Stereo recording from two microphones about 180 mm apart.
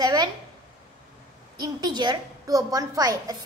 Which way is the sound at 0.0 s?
25° right (ahead or behind).